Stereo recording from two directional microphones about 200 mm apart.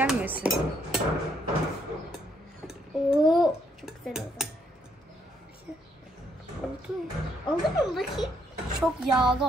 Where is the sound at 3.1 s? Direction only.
20° left (ahead or behind).